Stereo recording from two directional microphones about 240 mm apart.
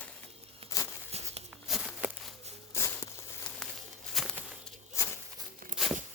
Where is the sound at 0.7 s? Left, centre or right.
Centre.